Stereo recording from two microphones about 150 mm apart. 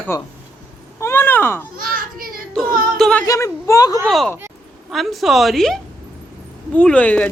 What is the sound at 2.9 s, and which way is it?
Speech, 5° left (ahead or behind).